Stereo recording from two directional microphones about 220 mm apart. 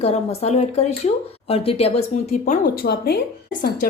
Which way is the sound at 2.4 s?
45° left (ahead or behind).